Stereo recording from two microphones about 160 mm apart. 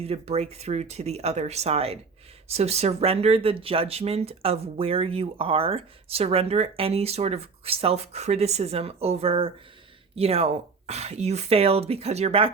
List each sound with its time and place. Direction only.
0.0 s speech: 40° right (ahead or behind)